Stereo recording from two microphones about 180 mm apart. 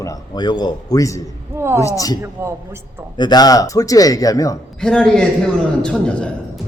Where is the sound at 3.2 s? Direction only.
20° left (ahead or behind).